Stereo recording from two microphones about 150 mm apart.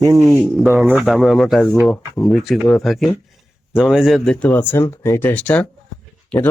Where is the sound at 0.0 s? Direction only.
25° right (ahead or behind).